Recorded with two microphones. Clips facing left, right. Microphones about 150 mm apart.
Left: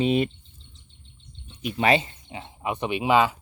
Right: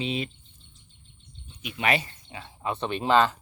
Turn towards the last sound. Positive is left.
turn(degrees=10)  # may be behind; listen again after turning